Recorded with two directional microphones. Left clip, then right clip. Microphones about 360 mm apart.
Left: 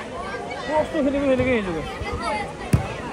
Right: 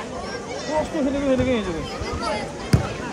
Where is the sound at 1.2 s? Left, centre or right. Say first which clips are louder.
Even; centre.